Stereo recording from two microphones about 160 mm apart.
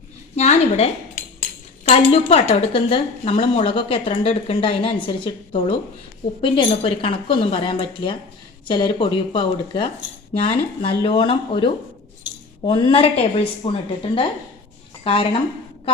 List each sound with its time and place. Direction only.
0.3 s speech: 45° left (ahead or behind)